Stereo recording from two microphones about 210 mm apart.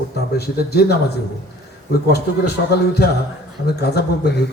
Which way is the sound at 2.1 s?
50° left (ahead or behind).